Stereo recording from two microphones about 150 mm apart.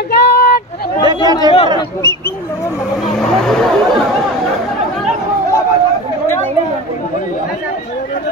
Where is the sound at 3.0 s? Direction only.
5° left (ahead or behind).